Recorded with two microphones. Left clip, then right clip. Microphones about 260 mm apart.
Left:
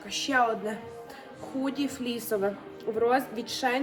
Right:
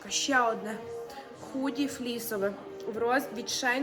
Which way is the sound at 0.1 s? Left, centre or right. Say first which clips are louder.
Left 1 dB; centre.